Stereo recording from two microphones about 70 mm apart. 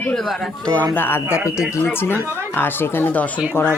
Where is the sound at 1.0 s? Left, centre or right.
Left.